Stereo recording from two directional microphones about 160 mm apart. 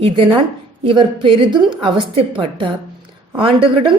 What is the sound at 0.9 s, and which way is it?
A woman's voice, 30° right (ahead or behind).